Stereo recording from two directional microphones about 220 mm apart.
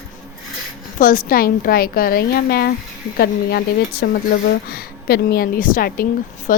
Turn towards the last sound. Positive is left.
turn(degrees=40)  # may be behind; listen again after turning